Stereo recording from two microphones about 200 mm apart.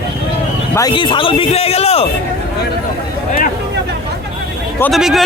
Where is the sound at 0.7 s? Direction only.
20° left (ahead or behind).